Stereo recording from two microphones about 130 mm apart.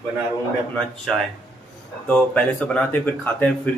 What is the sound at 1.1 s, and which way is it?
Speech, 5° left (ahead or behind).